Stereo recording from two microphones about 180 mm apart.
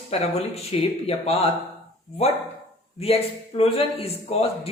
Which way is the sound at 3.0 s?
35° left (ahead or behind).